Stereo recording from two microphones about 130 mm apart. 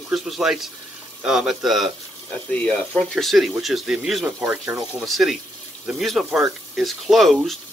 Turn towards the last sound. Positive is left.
turn(degrees=0)  # may be behind; listen again after turning